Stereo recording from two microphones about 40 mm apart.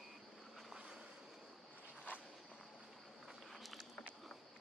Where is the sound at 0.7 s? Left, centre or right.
Right.